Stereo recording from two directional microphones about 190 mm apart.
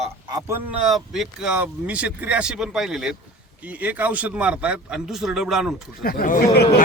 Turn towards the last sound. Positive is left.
turn(degrees=50)  # may be behind; listen again after turning